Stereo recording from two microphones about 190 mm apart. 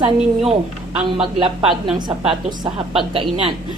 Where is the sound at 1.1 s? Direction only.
25° right (ahead or behind).